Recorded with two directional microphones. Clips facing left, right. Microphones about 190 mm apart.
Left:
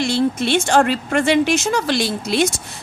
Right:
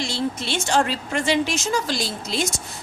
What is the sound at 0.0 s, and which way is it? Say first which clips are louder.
Speech: left 8 dB; 60° left (ahead or behind).